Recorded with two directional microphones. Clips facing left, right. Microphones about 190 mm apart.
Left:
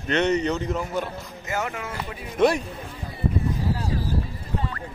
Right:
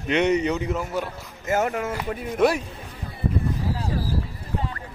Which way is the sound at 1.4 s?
45° right (ahead or behind).